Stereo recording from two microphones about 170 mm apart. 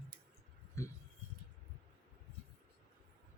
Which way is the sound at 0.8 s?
15° left (ahead or behind).